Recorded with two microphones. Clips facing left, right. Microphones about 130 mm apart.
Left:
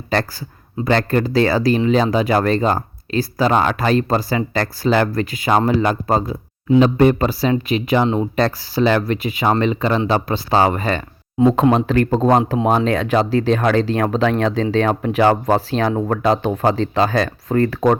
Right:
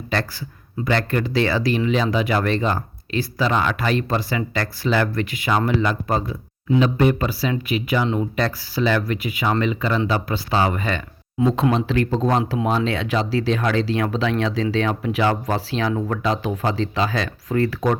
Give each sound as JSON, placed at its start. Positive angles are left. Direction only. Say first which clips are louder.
{"t": 0.1, "sound": "speech", "louder": "left 5 dB", "side_deg": 40}